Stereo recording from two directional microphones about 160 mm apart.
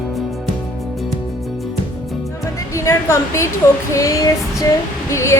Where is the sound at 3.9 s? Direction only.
20° left (ahead or behind).